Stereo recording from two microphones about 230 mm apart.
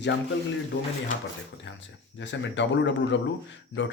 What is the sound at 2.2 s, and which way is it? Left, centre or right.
Speech, left.